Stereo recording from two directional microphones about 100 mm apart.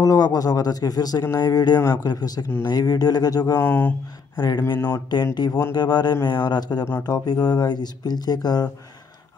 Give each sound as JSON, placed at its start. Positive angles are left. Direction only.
{"t": 0.0, "sound": "speech", "side_deg": 40}
{"t": 3.6, "sound": "speech", "side_deg": 15}
{"t": 4.4, "sound": "speech", "side_deg": 45}
{"t": 4.6, "sound": "speech", "side_deg": 20}
{"t": 5.3, "sound": "speech", "side_deg": 45}
{"t": 6.8, "sound": "speech", "side_deg": 25}
{"t": 7.1, "sound": "speech", "side_deg": 45}